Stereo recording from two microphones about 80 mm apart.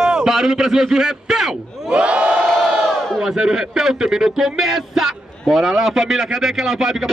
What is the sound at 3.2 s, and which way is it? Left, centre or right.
Speech, centre.